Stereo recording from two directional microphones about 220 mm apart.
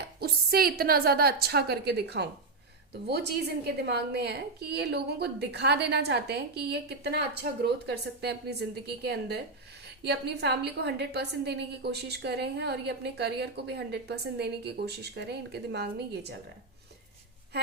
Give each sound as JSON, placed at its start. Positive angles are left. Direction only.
{"t": 0.2, "sound": "a woman's voice", "side_deg": -45}